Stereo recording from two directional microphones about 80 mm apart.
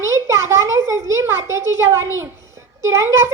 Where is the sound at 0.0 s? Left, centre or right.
Right.